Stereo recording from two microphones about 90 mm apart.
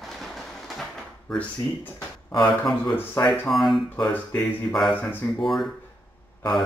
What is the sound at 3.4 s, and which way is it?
Speech, centre (ahead or behind).